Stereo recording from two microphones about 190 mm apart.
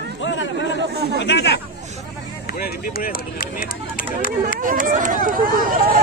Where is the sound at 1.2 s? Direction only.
65° left (ahead or behind).